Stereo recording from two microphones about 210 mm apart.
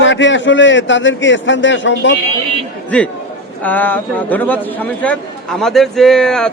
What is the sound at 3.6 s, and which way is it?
A man's voice, 10° left (ahead or behind).